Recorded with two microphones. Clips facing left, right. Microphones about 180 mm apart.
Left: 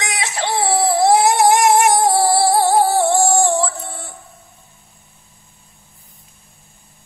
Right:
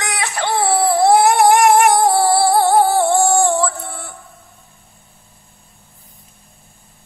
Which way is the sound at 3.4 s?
20° left (ahead or behind).